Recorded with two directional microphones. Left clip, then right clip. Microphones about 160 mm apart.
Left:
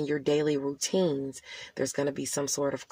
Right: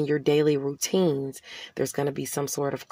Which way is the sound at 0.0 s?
35° right (ahead or behind).